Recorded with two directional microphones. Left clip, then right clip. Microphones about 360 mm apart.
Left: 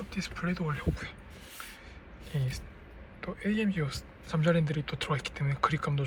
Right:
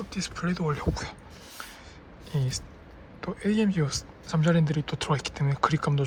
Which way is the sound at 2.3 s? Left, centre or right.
Centre.